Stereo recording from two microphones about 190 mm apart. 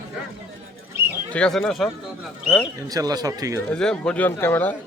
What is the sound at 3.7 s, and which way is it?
Speech, 5° left (ahead or behind).